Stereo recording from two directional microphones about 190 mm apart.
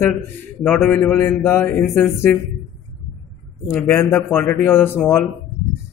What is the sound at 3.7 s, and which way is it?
A man's voice, 10° left (ahead or behind).